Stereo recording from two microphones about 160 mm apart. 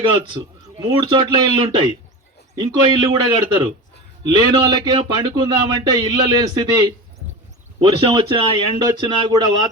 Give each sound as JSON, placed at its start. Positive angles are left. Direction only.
{"t": 0.3, "sound": "speech", "side_deg": -25}